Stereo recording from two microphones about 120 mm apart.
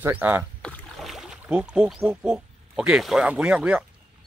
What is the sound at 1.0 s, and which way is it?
Boat, centre (ahead or behind).